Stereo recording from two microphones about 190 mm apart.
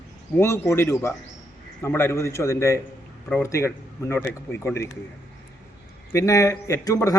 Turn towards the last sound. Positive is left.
turn(degrees=20)  # may be behind; listen again after turning